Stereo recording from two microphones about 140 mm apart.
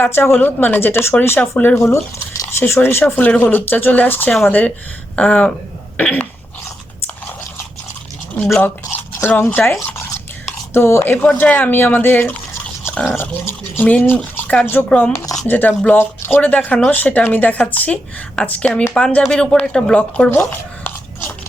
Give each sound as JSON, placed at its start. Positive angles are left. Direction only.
{"t": 0.0, "sound": "speech", "side_deg": 15}
{"t": 6.0, "sound": "throat clearing", "side_deg": 10}
{"t": 8.6, "sound": "speech", "side_deg": 15}